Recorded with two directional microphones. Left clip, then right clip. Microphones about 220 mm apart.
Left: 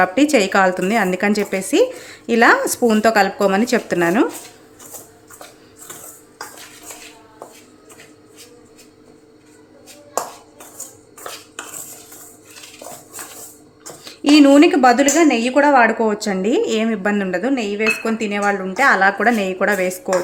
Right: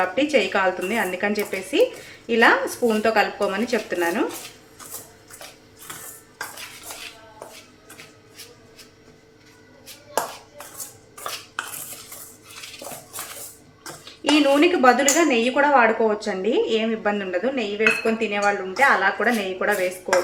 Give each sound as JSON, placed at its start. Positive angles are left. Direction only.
{"t": 0.0, "sound": "a woman's voice", "side_deg": 55}
{"t": 14.0, "sound": "a woman's voice", "side_deg": 50}